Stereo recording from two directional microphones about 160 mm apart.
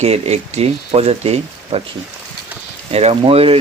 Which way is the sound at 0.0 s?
40° right (ahead or behind).